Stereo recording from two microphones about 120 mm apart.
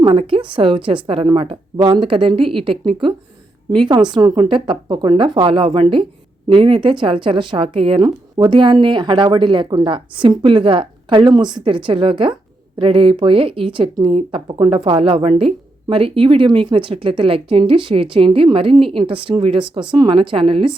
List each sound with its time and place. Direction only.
0.0 s a woman's voice: 45° right (ahead or behind)